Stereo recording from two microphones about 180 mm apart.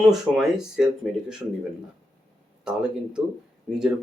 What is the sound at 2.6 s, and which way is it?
Speech, 5° right (ahead or behind).